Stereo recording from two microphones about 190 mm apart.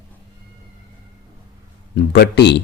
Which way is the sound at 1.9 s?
60° left (ahead or behind).